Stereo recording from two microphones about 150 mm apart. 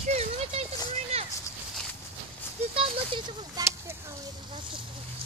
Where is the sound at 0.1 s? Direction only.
45° right (ahead or behind).